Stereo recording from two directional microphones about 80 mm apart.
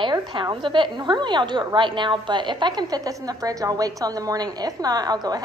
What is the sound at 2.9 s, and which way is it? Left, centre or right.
A woman's voice, right.